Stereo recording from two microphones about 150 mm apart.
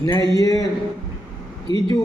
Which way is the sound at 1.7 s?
35° right (ahead or behind).